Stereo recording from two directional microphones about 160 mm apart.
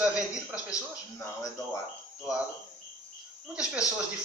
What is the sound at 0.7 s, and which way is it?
Speech, 20° left (ahead or behind).